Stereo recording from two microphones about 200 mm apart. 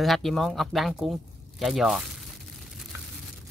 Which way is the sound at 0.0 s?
Centre (ahead or behind).